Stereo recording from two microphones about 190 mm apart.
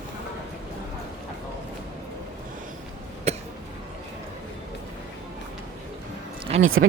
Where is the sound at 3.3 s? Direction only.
35° right (ahead or behind).